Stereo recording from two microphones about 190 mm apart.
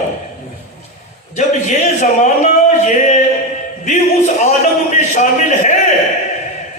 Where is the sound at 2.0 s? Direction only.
40° left (ahead or behind).